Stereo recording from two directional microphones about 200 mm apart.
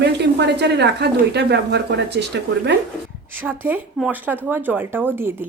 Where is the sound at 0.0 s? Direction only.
60° right (ahead or behind).